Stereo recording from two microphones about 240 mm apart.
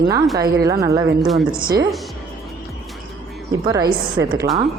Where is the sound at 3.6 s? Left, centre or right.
Centre.